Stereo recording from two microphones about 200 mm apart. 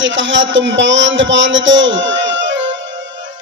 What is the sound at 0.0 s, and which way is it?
Speech, 65° right (ahead or behind).